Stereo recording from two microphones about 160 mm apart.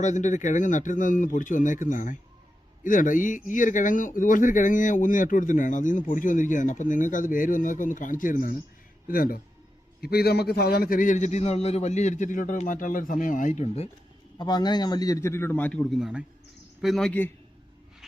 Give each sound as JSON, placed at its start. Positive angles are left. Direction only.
{"t": 0.0, "sound": "speech", "side_deg": 50}
{"t": 10.0, "sound": "speech", "side_deg": 75}
{"t": 14.3, "sound": "a man's voice", "side_deg": 25}